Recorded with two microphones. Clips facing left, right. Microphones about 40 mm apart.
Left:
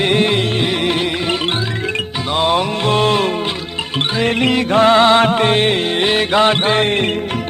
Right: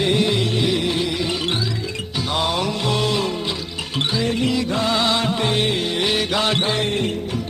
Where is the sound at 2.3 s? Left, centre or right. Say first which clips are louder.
Left 6 dB; left.